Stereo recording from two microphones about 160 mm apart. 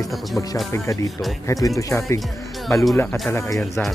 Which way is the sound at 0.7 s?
20° left (ahead or behind).